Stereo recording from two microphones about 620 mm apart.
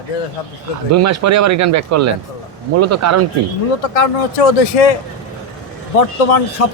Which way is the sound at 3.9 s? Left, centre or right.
Left.